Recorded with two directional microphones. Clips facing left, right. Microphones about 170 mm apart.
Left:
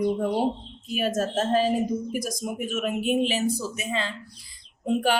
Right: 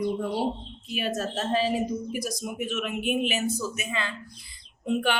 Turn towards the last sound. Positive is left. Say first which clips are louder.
# left 3 dB
turn(degrees=35)  # may be behind; listen again after turning